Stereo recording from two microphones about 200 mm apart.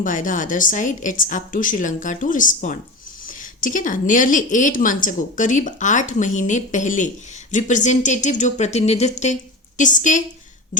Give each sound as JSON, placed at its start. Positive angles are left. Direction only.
{"t": 0.0, "sound": "a woman's voice", "side_deg": 40}